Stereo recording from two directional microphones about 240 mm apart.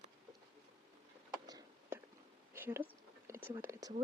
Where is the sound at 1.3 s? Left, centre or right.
Centre.